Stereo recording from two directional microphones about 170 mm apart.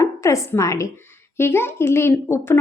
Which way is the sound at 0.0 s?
15° left (ahead or behind).